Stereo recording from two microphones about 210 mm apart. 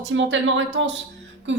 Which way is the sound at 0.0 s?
60° right (ahead or behind).